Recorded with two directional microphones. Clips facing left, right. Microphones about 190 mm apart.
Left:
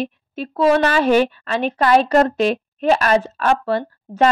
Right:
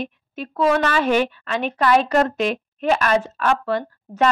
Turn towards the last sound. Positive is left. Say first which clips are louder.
# left 2 dB
turn(degrees=35)  # may be behind; listen again after turning